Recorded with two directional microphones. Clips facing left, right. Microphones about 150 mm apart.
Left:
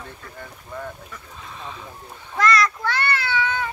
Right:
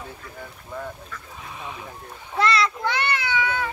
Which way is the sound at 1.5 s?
15° right (ahead or behind).